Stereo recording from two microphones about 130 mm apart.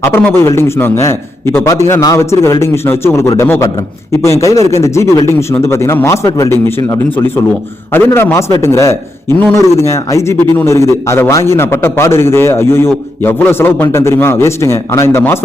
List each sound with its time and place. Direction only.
0.0 s a man's voice: 20° left (ahead or behind)